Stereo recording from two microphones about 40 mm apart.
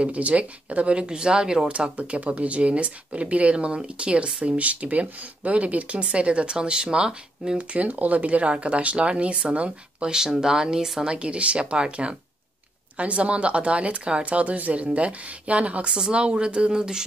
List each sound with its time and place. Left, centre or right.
0.0 s speech: right; by 1.7 s centre
1.7 s speech: right
7.7 s speech: right
10.0 s speech: centre
11.1 s speech: right
15.9 s speech: right